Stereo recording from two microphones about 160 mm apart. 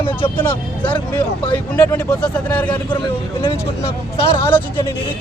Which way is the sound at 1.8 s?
15° left (ahead or behind).